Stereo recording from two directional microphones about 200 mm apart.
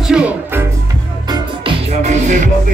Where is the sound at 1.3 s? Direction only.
25° right (ahead or behind).